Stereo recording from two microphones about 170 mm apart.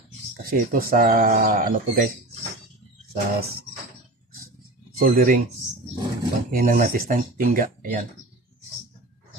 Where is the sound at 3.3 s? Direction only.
65° right (ahead or behind).